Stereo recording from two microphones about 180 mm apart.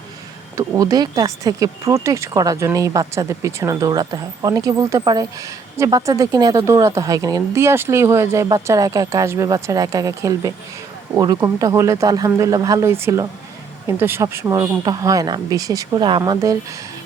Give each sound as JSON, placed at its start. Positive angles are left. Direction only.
{"t": 0.5, "sound": "speech", "side_deg": -20}